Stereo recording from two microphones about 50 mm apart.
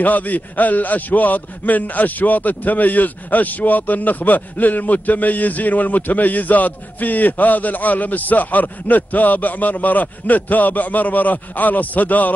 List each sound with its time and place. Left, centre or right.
0.0 s a man's voice: left